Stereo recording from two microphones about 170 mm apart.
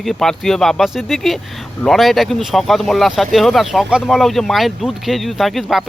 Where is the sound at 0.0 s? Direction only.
Centre (ahead or behind).